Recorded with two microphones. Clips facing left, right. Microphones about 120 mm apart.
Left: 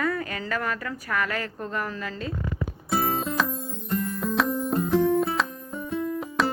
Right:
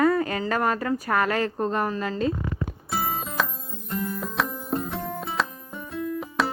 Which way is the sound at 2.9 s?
Centre (ahead or behind).